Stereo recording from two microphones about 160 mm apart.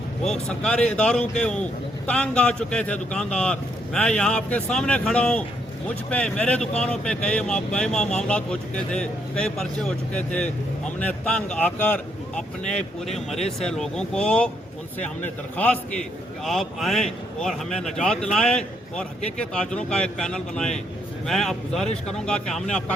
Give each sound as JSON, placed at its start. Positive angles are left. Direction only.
{"t": 0.3, "sound": "a man's voice", "side_deg": 5}
{"t": 13.1, "sound": "speech", "side_deg": 40}
{"t": 13.6, "sound": "a man's voice", "side_deg": 5}